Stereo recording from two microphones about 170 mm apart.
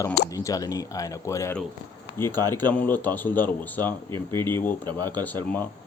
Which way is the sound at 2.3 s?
25° right (ahead or behind).